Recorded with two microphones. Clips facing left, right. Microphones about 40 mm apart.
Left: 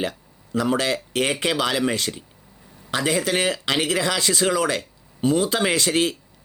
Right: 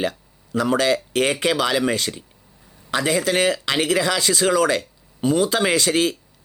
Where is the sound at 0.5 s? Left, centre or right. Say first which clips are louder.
Right 3 dB; right.